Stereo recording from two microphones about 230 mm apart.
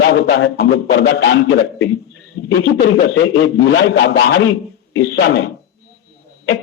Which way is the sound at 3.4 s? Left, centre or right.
Left.